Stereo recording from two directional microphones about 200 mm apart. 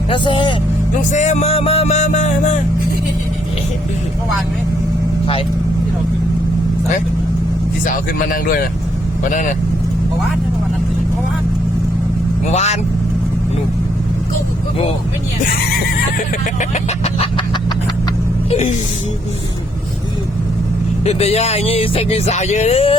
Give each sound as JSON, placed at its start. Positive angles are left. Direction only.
{"t": 0.1, "sound": "speech", "side_deg": 25}
{"t": 1.1, "sound": "music", "side_deg": 35}
{"t": 7.9, "sound": "speech", "side_deg": 45}
{"t": 12.5, "sound": "speech", "side_deg": 35}
{"t": 16.1, "sound": "snicker", "side_deg": 40}
{"t": 18.5, "sound": "speech", "side_deg": 35}
{"t": 21.0, "sound": "speech", "side_deg": 30}